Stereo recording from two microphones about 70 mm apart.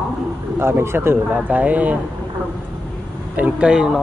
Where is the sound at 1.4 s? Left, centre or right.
Right.